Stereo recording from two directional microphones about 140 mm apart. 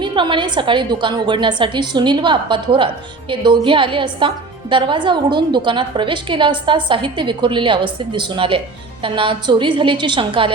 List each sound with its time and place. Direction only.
0.0 s a woman's voice: 35° right (ahead or behind)